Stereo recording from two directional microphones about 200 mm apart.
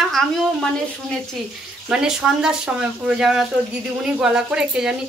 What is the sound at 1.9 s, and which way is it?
A woman's voice, 5° right (ahead or behind).